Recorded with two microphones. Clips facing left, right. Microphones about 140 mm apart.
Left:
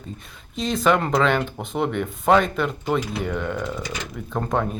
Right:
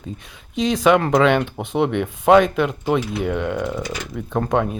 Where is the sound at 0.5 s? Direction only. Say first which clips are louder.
Right 4 dB; centre (ahead or behind).